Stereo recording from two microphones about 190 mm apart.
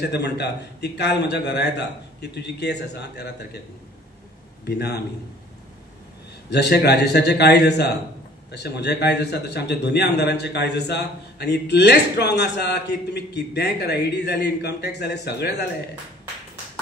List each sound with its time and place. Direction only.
0.0 s a man's voice: 60° left (ahead or behind)
4.6 s a man's voice: 60° left (ahead or behind)
6.5 s a man's voice: 60° left (ahead or behind)